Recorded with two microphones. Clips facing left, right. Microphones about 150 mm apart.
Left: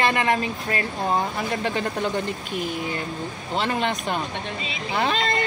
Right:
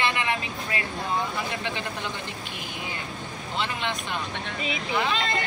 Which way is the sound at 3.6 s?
40° left (ahead or behind).